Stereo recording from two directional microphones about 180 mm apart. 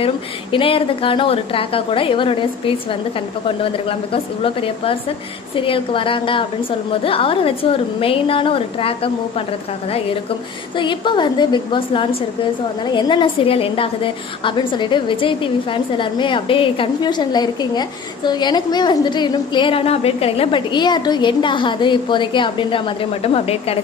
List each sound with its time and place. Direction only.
0.0 s a woman's voice: 30° left (ahead or behind)
10.8 s a woman's voice: 25° left (ahead or behind)